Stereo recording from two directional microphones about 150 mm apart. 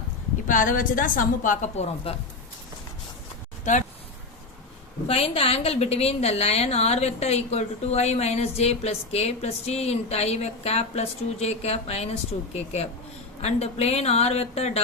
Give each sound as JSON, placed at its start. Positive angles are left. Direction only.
{"t": 0.4, "sound": "a woman's voice", "side_deg": 60}
{"t": 5.0, "sound": "a woman's voice", "side_deg": 40}